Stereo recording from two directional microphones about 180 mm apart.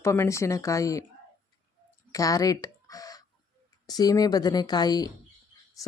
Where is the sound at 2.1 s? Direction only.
20° left (ahead or behind).